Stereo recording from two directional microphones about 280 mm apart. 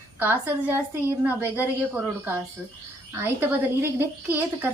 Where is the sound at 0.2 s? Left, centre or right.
Centre.